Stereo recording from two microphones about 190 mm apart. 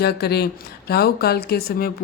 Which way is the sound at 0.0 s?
55° left (ahead or behind).